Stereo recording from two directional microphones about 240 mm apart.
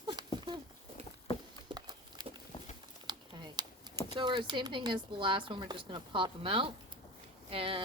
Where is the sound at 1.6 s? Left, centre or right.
Centre.